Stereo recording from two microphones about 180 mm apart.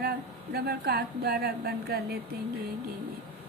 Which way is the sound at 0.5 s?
60° right (ahead or behind).